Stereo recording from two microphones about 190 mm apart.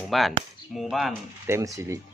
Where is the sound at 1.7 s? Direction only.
15° right (ahead or behind).